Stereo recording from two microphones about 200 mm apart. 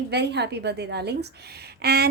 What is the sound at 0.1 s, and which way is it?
A woman's voice, 55° right (ahead or behind).